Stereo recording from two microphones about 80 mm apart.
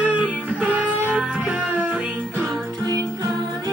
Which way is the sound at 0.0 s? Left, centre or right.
Centre.